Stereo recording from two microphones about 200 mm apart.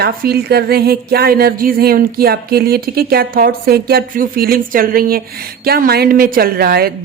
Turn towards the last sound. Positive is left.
turn(degrees=-50)  # may be behind; listen again after turning